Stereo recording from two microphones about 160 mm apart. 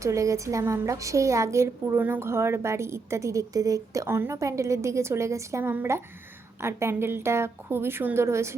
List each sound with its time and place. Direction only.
0.0 s a woman's voice: 20° right (ahead or behind)